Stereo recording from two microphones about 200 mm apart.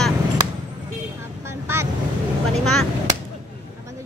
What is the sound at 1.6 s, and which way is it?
Vehicle, 15° right (ahead or behind).